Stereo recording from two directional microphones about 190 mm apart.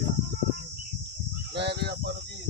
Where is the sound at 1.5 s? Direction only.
65° right (ahead or behind).